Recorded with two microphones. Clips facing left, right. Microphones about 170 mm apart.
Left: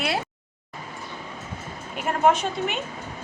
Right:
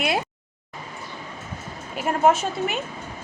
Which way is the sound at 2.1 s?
5° right (ahead or behind).